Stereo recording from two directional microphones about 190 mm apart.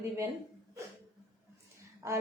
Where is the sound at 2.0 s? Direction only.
15° right (ahead or behind).